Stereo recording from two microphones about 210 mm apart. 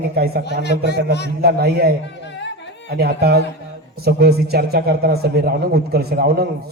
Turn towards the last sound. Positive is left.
turn(degrees=-50)  # may be behind; listen again after turning